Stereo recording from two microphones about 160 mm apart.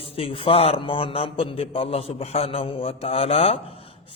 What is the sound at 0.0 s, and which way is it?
A man's voice, 35° left (ahead or behind).